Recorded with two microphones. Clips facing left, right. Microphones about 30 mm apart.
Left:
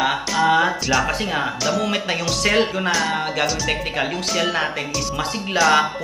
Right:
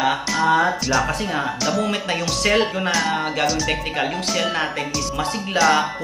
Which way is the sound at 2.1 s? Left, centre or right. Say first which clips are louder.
Even; centre.